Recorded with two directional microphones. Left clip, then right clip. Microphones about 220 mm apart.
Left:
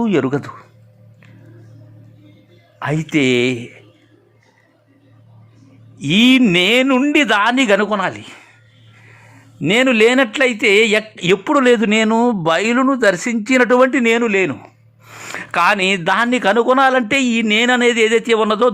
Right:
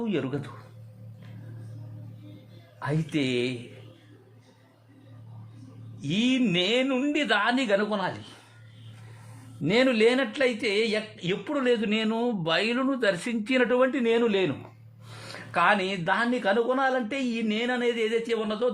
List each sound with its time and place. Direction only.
0.0 s a man's voice: 30° left (ahead or behind)
2.7 s a man's voice: 25° left (ahead or behind)
6.0 s a man's voice: 30° left (ahead or behind)
9.6 s a man's voice: 25° left (ahead or behind)
15.2 s a man's voice: 25° left (ahead or behind)